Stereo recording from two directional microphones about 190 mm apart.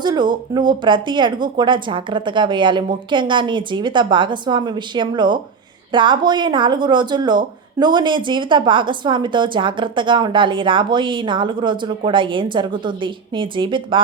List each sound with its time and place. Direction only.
0.0 s speech: 25° right (ahead or behind)